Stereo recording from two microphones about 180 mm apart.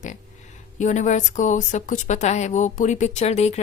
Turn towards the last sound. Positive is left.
turn(degrees=35)  # may be behind; listen again after turning